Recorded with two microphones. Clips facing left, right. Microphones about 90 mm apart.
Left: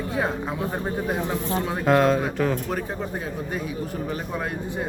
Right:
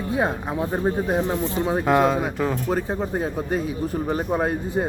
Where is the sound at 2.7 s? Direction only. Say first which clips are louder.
Right 4 dB; 35° right (ahead or behind).